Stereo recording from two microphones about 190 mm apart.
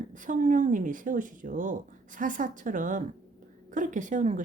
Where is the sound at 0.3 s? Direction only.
40° right (ahead or behind).